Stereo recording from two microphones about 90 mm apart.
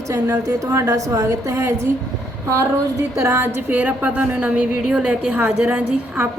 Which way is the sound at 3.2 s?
30° right (ahead or behind).